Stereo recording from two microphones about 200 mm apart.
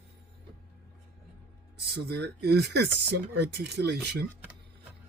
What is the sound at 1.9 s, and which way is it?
Speech, 55° right (ahead or behind).